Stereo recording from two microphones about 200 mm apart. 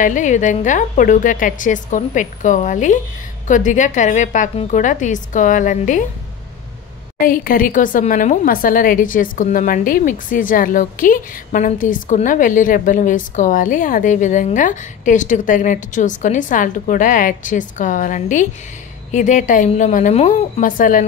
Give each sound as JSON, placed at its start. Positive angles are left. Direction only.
{"t": 0.0, "sound": "a woman's voice", "side_deg": 40}
{"t": 7.2, "sound": "a woman's voice", "side_deg": 45}